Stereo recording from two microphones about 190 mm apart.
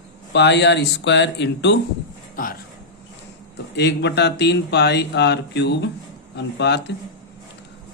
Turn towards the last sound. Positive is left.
turn(degrees=65)  # may be behind; listen again after turning